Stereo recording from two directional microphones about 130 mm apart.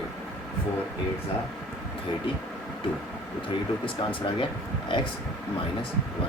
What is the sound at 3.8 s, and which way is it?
Speech, 40° left (ahead or behind).